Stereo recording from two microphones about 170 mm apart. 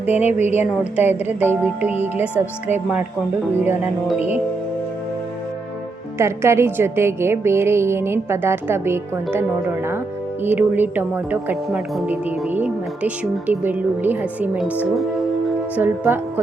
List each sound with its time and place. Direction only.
0.2 s speech: 40° left (ahead or behind)
0.4 s a woman's voice: 10° right (ahead or behind)
6.1 s a woman's voice: 15° right (ahead or behind)
10.4 s a woman's voice: 10° right (ahead or behind)